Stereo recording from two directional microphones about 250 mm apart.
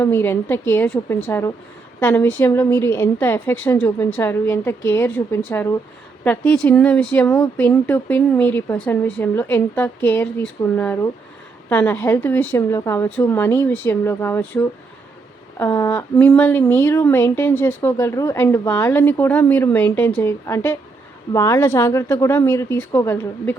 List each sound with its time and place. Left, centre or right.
0.0 s a woman's voice: centre